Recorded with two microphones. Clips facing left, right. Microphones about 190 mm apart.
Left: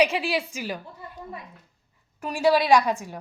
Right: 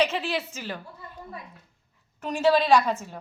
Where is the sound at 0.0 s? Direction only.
10° left (ahead or behind).